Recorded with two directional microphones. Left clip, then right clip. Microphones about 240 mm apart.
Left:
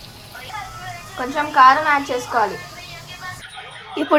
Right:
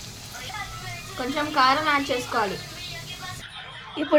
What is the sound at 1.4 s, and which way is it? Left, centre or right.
Speech, right.